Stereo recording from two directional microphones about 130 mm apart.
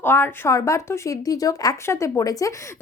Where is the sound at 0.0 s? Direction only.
15° left (ahead or behind).